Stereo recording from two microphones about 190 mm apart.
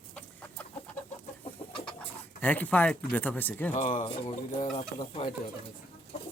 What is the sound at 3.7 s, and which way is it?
Speech, 40° left (ahead or behind).